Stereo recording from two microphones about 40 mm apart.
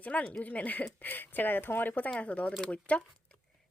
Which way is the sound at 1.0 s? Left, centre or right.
Left.